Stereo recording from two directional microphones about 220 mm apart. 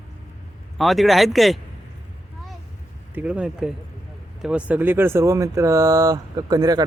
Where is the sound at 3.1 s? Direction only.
5° right (ahead or behind).